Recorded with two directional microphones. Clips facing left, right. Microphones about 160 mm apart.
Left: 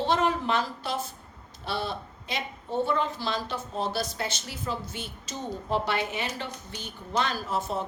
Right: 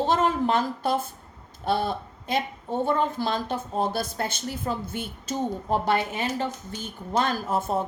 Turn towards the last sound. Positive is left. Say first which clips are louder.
# right 4 dB
turn(degrees=-50)  # may be behind; listen again after turning